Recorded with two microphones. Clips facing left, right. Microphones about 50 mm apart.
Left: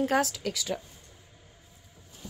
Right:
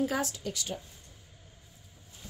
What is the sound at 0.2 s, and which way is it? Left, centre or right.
Speech, left.